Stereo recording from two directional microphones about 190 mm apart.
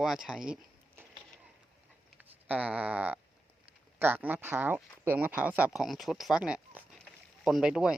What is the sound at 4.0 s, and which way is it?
Speech, 10° right (ahead or behind).